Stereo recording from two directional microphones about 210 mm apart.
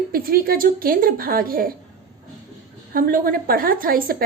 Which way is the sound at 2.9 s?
40° right (ahead or behind).